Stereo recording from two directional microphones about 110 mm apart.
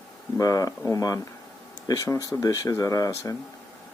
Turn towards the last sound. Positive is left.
turn(degrees=30)  # may be behind; listen again after turning